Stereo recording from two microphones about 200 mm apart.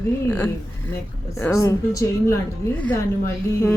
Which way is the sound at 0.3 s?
10° left (ahead or behind).